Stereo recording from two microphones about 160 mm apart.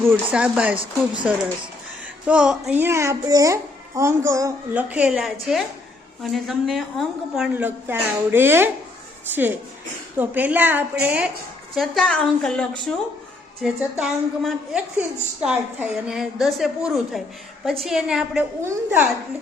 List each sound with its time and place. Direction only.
0.0 s a child's voice: 10° right (ahead or behind)
4.7 s a woman's voice: 10° right (ahead or behind)
7.5 s a child's voice: 10° right (ahead or behind); by 12.9 s 5° left (ahead or behind)
14.0 s a woman's voice: 5° right (ahead or behind)